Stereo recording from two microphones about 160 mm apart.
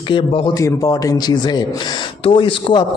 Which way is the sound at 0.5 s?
20° left (ahead or behind).